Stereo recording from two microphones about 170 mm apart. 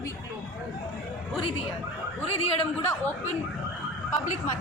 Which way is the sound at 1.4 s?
35° left (ahead or behind).